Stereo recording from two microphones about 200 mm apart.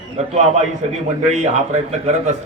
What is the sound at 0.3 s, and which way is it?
Speech, 35° right (ahead or behind).